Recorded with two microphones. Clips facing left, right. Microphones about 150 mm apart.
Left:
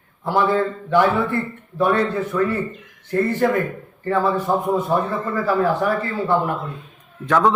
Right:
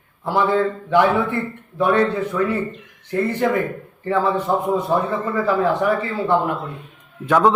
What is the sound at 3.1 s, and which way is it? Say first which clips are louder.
A man's voice: left 1 dB; 15° right (ahead or behind).